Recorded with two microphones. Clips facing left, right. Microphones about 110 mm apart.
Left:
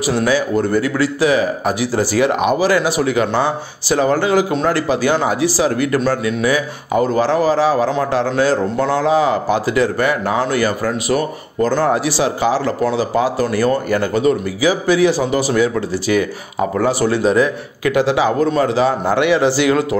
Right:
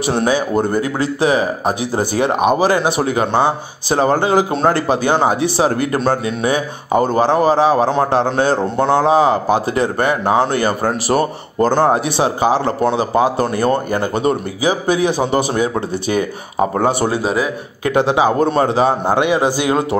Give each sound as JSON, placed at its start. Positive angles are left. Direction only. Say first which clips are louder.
{"t": 0.0, "sound": "speech", "louder": "even", "side_deg": -25}
{"t": 17.2, "sound": "speech", "louder": "left 4 dB", "side_deg": -10}
{"t": 17.8, "sound": "speech", "louder": "right 1 dB", "side_deg": -25}